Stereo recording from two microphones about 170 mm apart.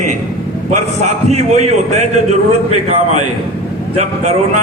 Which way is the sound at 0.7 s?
45° right (ahead or behind).